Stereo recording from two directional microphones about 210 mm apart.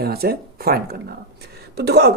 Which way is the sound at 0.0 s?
50° right (ahead or behind).